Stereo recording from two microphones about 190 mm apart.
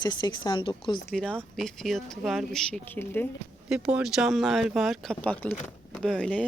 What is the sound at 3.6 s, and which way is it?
Speech, 5° right (ahead or behind).